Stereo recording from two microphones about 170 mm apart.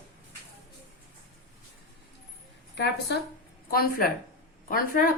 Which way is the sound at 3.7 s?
60° left (ahead or behind).